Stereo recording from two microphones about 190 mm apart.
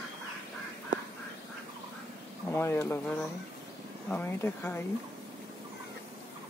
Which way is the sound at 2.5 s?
10° left (ahead or behind).